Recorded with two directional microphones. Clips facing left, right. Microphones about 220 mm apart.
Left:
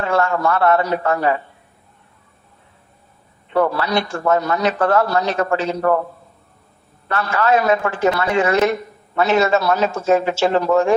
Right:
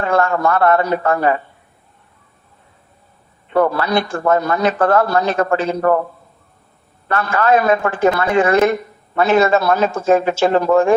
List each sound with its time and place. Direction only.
0.0 s a man's voice: 55° right (ahead or behind)
3.5 s a man's voice: 50° right (ahead or behind)
7.1 s a man's voice: 50° right (ahead or behind)